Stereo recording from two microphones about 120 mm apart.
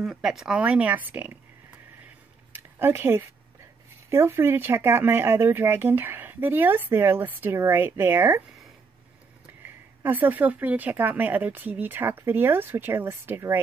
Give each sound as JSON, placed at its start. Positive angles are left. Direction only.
{"t": 0.0, "sound": "speech", "side_deg": -5}
{"t": 2.5, "sound": "a sound", "side_deg": -20}
{"t": 4.1, "sound": "speech", "side_deg": -20}
{"t": 10.0, "sound": "speech", "side_deg": -15}